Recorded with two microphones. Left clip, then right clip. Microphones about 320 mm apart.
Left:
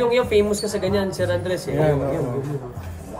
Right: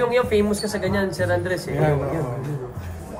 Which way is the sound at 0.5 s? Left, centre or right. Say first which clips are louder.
Left 1 dB; centre.